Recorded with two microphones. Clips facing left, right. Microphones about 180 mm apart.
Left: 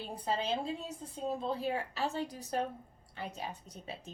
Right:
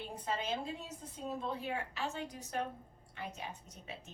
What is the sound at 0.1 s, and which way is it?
A woman's voice, 30° left (ahead or behind).